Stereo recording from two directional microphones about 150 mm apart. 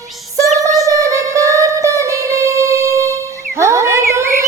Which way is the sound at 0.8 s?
20° right (ahead or behind).